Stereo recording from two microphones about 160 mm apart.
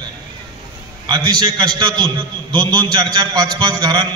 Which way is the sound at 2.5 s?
30° right (ahead or behind).